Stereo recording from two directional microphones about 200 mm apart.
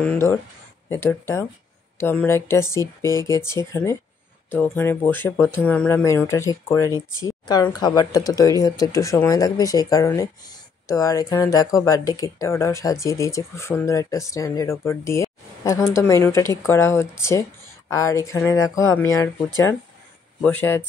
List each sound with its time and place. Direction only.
0.0 s speech: 10° left (ahead or behind)